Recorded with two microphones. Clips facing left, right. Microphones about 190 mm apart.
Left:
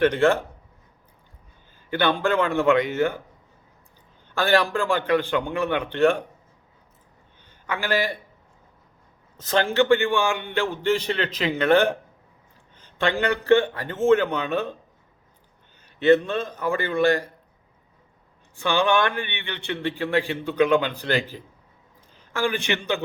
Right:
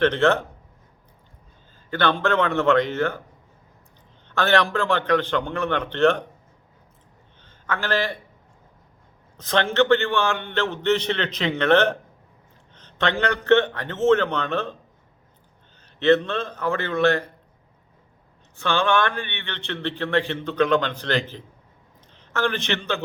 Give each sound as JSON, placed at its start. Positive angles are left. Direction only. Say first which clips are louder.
{"t": 0.0, "sound": "a man's voice", "louder": "even", "side_deg": 10}
{"t": 1.9, "sound": "a man's voice", "louder": "even", "side_deg": 10}
{"t": 4.4, "sound": "a man's voice", "louder": "even", "side_deg": 10}
{"t": 7.4, "sound": "a man's voice", "louder": "even", "side_deg": 10}
{"t": 9.4, "sound": "a man's voice", "louder": "even", "side_deg": 5}
{"t": 16.0, "sound": "a man's voice", "louder": "left 1 dB", "side_deg": 10}
{"t": 18.5, "sound": "a man's voice", "louder": "left 1 dB", "side_deg": 15}